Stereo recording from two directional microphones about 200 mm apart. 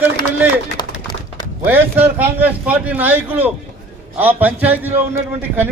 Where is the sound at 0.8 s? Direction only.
20° left (ahead or behind).